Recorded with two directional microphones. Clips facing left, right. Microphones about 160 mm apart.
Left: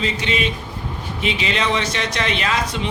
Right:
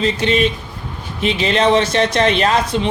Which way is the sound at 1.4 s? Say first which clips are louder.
Right 9 dB; 40° right (ahead or behind).